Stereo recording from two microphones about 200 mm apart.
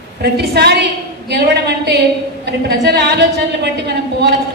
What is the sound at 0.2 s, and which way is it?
A woman's voice, 55° right (ahead or behind).